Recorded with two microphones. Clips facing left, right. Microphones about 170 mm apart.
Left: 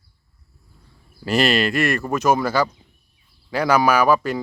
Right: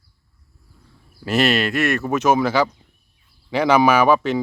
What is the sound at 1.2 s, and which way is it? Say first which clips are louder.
Speech: even; centre (ahead or behind).